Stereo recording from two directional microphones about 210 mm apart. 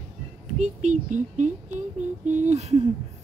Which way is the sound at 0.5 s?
35° right (ahead or behind).